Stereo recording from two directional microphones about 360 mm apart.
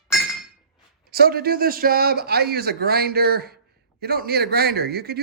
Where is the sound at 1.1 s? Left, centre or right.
Right.